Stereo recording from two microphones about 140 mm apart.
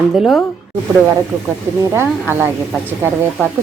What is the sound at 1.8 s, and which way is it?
Speech, 15° right (ahead or behind).